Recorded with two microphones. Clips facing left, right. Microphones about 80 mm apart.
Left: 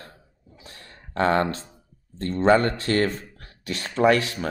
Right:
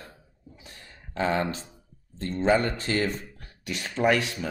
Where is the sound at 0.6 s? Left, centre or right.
Left.